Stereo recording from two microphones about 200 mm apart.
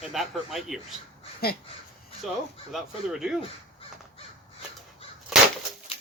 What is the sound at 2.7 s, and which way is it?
Speech, centre (ahead or behind).